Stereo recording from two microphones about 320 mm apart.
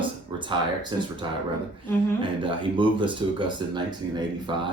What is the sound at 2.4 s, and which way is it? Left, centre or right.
Speech, centre.